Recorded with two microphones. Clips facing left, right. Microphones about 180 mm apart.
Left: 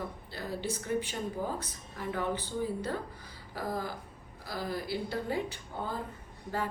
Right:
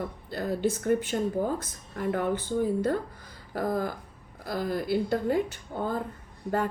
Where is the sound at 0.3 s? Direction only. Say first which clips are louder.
Right 10 dB; 50° right (ahead or behind).